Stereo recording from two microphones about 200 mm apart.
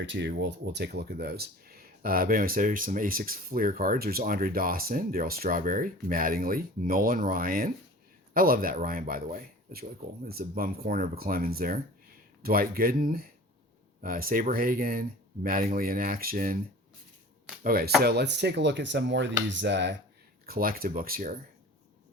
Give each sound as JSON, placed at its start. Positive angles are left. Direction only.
{"t": 0.0, "sound": "speech", "side_deg": -65}
{"t": 17.6, "sound": "speech", "side_deg": -45}
{"t": 20.5, "sound": "speech", "side_deg": -45}